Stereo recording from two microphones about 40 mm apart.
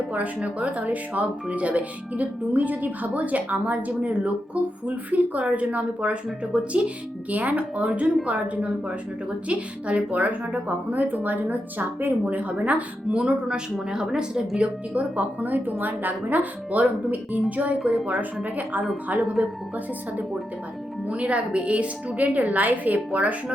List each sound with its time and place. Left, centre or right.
0.3 s a woman's voice: right
12.2 s speech: right
13.1 s a woman's voice: right
14.6 s a woman's voice: right
17.8 s speech: right
18.4 s a woman's voice: right